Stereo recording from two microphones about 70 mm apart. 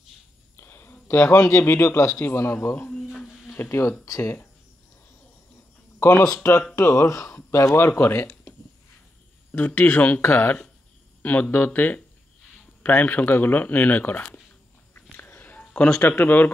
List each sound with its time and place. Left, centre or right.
0.6 s a man's voice: left
3.2 s a sound: centre
3.5 s speech: left
4.0 s speech: left
5.9 s a sound: left
6.2 s speech: left
7.5 s speech: left
9.5 s speech: left
15.2 s a sound: left
15.9 s speech: left